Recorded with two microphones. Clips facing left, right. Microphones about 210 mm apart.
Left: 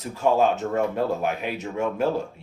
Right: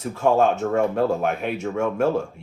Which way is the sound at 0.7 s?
50° right (ahead or behind).